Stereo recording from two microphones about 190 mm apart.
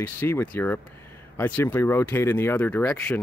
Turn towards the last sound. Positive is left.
turn(degrees=10)  # may be behind; listen again after turning